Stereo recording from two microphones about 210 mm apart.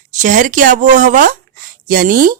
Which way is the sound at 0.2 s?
40° right (ahead or behind).